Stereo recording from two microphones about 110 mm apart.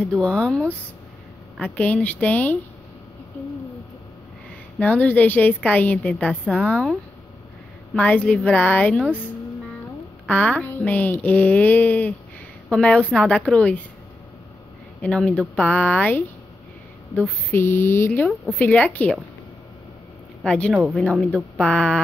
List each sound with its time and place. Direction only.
0.2 s a woman's voice: 5° left (ahead or behind)
4.7 s a woman's voice: 15° left (ahead or behind)
7.9 s a woman's voice: 10° left (ahead or behind)
10.2 s a woman's voice: 10° left (ahead or behind)
15.0 s a woman's voice: 10° left (ahead or behind)
17.5 s a woman's voice: 20° left (ahead or behind)
20.4 s a woman's voice: 10° left (ahead or behind)